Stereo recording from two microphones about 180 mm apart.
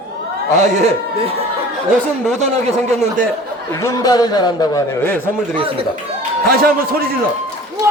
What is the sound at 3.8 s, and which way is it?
A man's voice, 20° left (ahead or behind).